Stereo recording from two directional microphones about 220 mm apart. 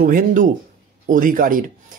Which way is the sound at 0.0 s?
40° right (ahead or behind).